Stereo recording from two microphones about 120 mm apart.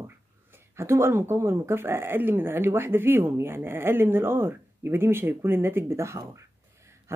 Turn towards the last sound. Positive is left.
turn(degrees=-25)  # may be behind; listen again after turning